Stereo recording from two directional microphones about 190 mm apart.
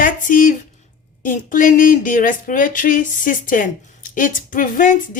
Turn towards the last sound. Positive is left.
turn(degrees=45)  # may be behind; listen again after turning